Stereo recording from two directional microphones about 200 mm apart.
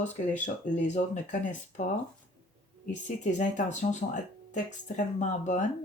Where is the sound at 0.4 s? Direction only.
35° left (ahead or behind).